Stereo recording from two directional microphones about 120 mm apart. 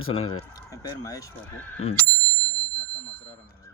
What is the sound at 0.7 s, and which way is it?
Speech, 30° left (ahead or behind).